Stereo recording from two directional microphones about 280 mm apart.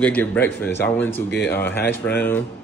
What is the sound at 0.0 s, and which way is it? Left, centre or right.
A man's voice, centre.